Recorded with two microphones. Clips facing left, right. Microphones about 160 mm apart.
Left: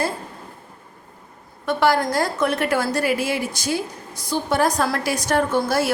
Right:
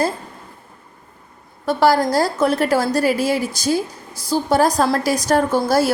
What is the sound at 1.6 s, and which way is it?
A woman's voice, 35° right (ahead or behind).